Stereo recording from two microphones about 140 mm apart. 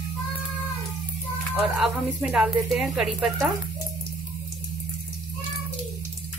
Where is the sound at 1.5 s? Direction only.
5° right (ahead or behind).